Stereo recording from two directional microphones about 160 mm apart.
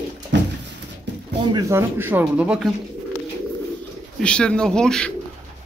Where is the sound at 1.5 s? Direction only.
20° right (ahead or behind).